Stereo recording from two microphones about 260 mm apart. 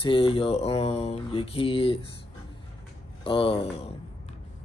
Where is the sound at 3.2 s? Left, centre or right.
Left.